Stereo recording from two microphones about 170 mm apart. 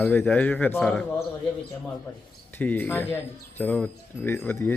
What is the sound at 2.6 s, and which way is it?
A man's voice, 10° left (ahead or behind).